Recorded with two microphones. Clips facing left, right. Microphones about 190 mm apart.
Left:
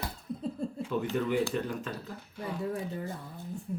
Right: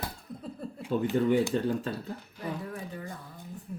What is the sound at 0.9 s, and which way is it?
Speech, 30° right (ahead or behind).